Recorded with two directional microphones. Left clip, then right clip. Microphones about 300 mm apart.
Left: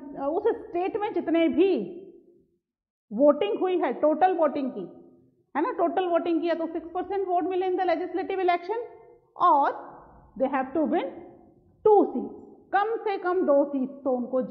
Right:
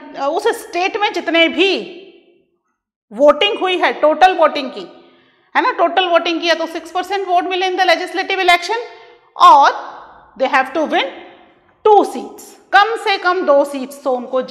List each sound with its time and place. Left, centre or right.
0.0 s a woman's voice: centre
3.2 s a woman's voice: centre
12.6 s a woman's voice: centre